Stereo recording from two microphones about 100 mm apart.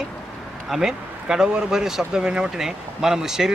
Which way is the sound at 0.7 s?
5° right (ahead or behind).